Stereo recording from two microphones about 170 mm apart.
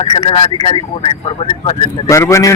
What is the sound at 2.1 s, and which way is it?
Speech, 15° left (ahead or behind).